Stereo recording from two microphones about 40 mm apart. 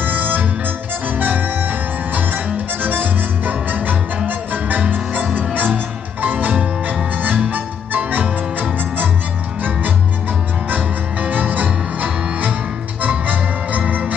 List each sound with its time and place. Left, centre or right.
0.0 s organ: right
1.0 s music: right